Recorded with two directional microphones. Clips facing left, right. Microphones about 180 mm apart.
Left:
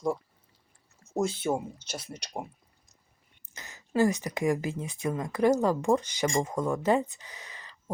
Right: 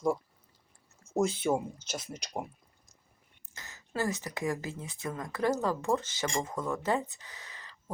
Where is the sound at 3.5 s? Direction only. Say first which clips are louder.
Left 8 dB; 15° left (ahead or behind).